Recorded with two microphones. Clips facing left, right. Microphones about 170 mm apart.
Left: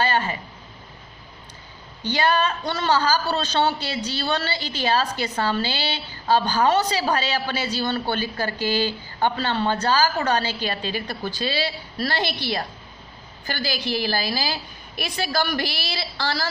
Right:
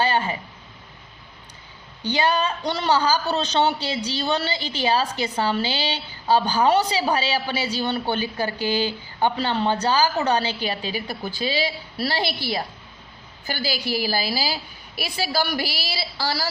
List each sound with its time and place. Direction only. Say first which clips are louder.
0.0 s speech: right 1 dB; 15° right (ahead or behind)
2.0 s a woman's voice: even; 10° right (ahead or behind)
13.5 s a woman's voice: even; 10° right (ahead or behind)